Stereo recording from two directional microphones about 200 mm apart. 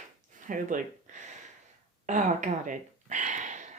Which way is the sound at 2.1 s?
40° right (ahead or behind).